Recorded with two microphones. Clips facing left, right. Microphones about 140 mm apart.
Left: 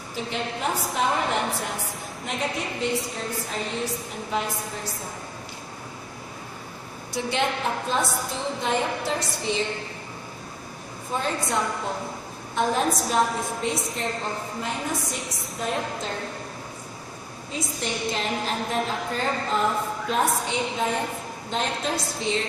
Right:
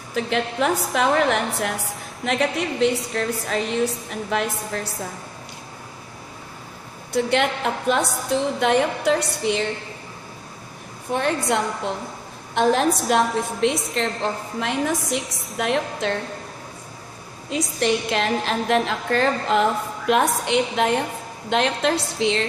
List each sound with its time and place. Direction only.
0.1 s a woman's voice: 80° right
7.1 s a woman's voice: 60° right (ahead or behind)
11.1 s a woman's voice: 65° right (ahead or behind)
17.5 s a woman's voice: 75° right (ahead or behind)